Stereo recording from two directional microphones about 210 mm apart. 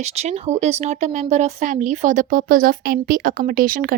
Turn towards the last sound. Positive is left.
turn(degrees=-40)  # may be behind; listen again after turning